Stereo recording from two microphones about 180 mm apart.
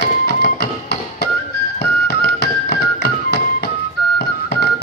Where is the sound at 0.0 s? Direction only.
70° left (ahead or behind).